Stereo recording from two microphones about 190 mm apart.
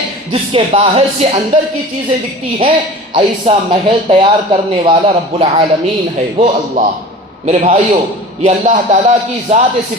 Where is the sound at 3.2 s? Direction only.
30° right (ahead or behind).